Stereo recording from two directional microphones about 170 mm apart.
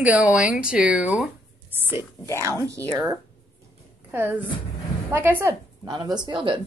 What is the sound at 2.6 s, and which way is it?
Speech, 20° right (ahead or behind).